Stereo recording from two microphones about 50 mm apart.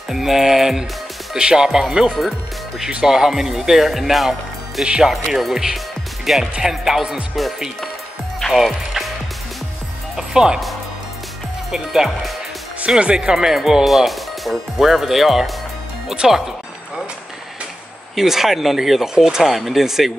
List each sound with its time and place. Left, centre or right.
0.1 s speech: centre
7.3 s speech: centre
10.1 s music: centre
11.7 s speech: centre
12.8 s speech: centre
18.1 s speech: centre